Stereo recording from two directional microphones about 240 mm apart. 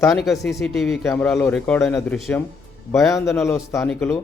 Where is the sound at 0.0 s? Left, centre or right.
Centre.